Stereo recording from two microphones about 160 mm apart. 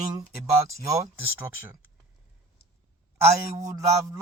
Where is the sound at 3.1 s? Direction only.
15° right (ahead or behind).